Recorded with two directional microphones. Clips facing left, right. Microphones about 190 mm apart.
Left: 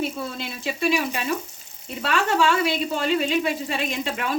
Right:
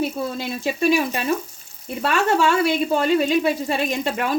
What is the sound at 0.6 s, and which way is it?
Speech, 40° right (ahead or behind).